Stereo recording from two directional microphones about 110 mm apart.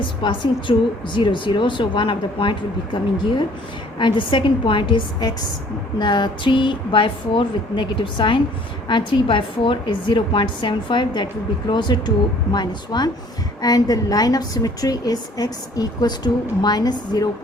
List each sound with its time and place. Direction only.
0.0 s a woman's voice: 50° left (ahead or behind)